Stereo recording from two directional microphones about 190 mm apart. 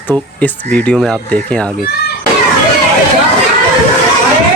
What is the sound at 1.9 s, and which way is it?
Speech, 55° left (ahead or behind).